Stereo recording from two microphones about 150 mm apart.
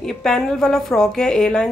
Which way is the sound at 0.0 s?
5° left (ahead or behind).